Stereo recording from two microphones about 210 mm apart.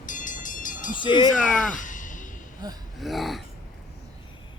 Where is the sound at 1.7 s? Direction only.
40° left (ahead or behind).